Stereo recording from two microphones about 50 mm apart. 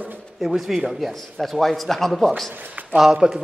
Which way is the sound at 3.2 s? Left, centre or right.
Centre.